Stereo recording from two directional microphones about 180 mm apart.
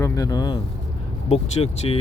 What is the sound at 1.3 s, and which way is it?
Speech, 35° left (ahead or behind).